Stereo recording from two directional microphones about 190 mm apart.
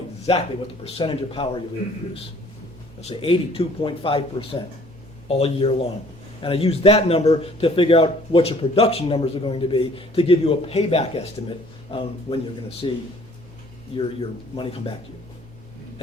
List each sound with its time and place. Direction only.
0.3 s a man's voice: 30° left (ahead or behind)
3.0 s a man's voice: 30° left (ahead or behind)